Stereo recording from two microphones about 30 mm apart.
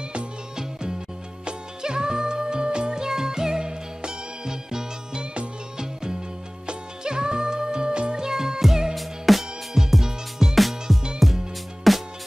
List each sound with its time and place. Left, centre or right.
1.4 s music: right
3.0 s music: centre
6.6 s music: right
8.2 s music: centre
9.8 s music: centre